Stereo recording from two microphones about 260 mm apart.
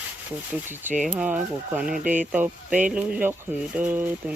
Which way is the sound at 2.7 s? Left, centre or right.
Right.